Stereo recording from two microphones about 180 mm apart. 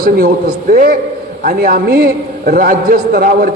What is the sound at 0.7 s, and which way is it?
A man's voice, 50° right (ahead or behind).